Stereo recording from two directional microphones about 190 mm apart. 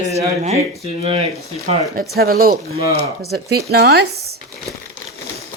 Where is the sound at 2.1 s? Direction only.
50° right (ahead or behind).